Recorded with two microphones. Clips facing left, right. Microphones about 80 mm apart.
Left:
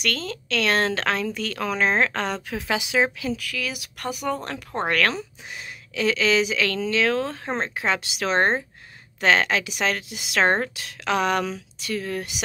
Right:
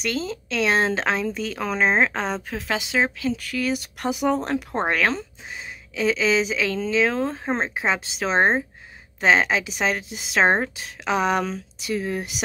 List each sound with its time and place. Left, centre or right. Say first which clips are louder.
0.3 s speech: right 1 dB; centre
2.5 s speech: left 2 dB; centre
4.0 s speech: right 4 dB; centre
5.1 s speech: right 2 dB; centre